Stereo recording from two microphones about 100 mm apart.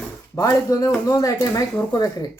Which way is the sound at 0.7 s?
35° left (ahead or behind).